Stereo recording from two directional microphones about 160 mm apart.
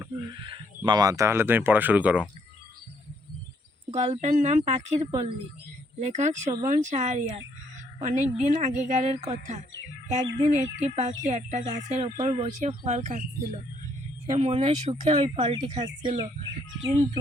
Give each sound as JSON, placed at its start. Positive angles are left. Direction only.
{"t": 0.9, "sound": "speech", "side_deg": -25}
{"t": 3.9, "sound": "speech", "side_deg": -45}
{"t": 15.8, "sound": "speech", "side_deg": -25}